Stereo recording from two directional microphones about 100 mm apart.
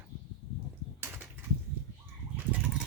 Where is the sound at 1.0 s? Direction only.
20° right (ahead or behind).